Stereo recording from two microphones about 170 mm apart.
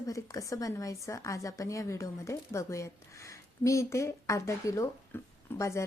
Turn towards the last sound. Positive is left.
turn(degrees=15)  # may be behind; listen again after turning